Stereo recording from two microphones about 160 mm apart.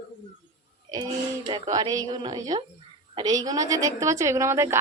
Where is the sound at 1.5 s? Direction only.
25° right (ahead or behind).